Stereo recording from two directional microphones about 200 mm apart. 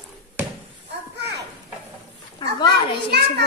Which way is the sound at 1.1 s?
55° right (ahead or behind).